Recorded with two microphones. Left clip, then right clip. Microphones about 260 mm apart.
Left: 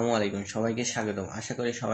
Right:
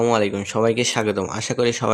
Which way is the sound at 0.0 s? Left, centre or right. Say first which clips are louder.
Right 8 dB; right.